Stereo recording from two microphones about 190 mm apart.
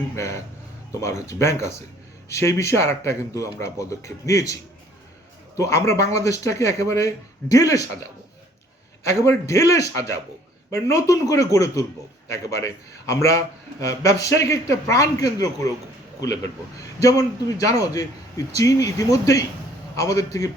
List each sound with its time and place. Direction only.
0.2 s a man's voice: 15° left (ahead or behind)
9.0 s a man's voice: 15° left (ahead or behind)